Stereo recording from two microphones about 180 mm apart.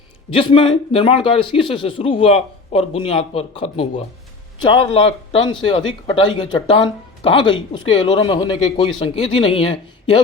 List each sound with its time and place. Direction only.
0.3 s speech: 30° left (ahead or behind)